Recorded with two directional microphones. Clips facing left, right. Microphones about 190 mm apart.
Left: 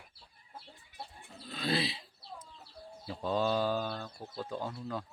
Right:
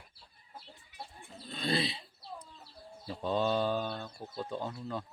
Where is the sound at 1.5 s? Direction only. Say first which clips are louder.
Even; centre (ahead or behind).